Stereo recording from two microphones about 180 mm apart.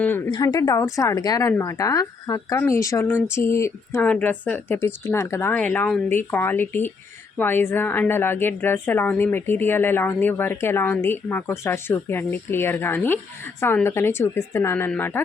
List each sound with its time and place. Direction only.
0.3 s a woman's voice: 20° left (ahead or behind)